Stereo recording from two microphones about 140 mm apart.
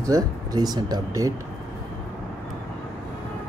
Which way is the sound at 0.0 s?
25° right (ahead or behind).